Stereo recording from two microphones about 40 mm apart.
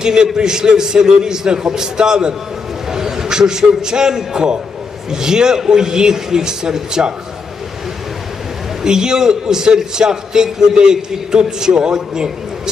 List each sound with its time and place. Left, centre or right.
0.0 s a man's voice: centre
8.8 s a man's voice: centre